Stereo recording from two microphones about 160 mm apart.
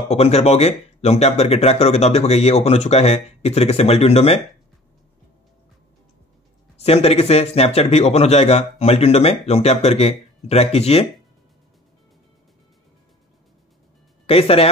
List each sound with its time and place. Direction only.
0.1 s speech: 40° left (ahead or behind)
6.8 s speech: 40° left (ahead or behind)
14.2 s speech: 40° left (ahead or behind)